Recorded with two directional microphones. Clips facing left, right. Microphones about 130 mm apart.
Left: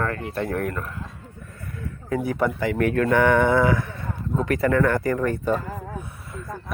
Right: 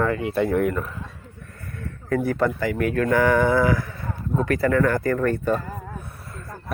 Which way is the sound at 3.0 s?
25° left (ahead or behind).